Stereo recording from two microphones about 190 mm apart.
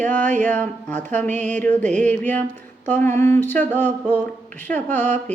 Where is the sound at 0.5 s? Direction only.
10° left (ahead or behind).